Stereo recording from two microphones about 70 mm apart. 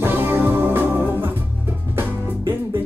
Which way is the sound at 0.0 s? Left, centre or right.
Right.